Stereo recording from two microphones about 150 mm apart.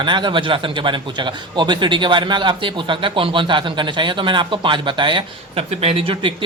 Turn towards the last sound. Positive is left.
turn(degrees=-35)  # may be behind; listen again after turning